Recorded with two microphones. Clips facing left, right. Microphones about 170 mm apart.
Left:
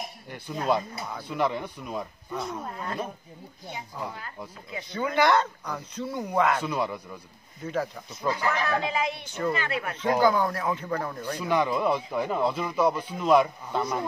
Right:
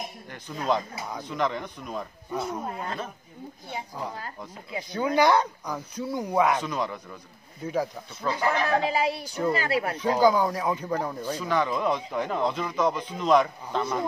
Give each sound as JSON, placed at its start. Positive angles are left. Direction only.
{"t": 0.3, "sound": "speech", "side_deg": 10}
{"t": 2.3, "sound": "speech", "side_deg": -10}
{"t": 4.9, "sound": "speech", "side_deg": -10}
{"t": 6.6, "sound": "speech", "side_deg": 10}
{"t": 7.6, "sound": "speech", "side_deg": -10}
{"t": 8.4, "sound": "speech", "side_deg": -30}
{"t": 9.9, "sound": "speech", "side_deg": -10}
{"t": 11.3, "sound": "speech", "side_deg": 10}